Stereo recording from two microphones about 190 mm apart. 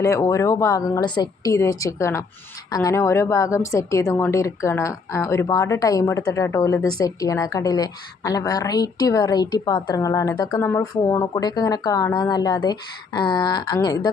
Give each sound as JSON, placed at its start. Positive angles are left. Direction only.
{"t": 0.0, "sound": "a woman's voice", "side_deg": 15}